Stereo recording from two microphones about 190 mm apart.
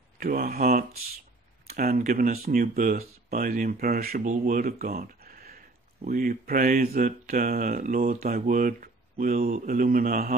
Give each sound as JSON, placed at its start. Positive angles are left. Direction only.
{"t": 0.2, "sound": "speech", "side_deg": -50}